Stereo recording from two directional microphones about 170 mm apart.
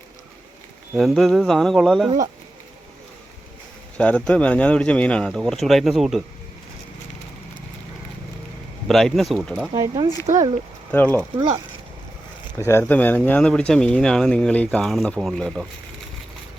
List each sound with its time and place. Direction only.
0.9 s speech: centre (ahead or behind)
3.9 s speech: 5° left (ahead or behind)
8.9 s speech: centre (ahead or behind)
9.7 s speech: 20° right (ahead or behind)
10.3 s speech: 45° right (ahead or behind)
10.9 s speech: 10° left (ahead or behind)
12.5 s speech: 15° left (ahead or behind)